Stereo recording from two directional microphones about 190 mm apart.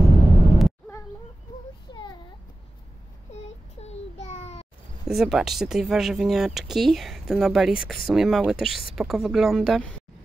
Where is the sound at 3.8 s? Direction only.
35° left (ahead or behind).